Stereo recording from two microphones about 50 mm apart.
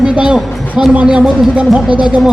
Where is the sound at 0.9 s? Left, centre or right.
Right.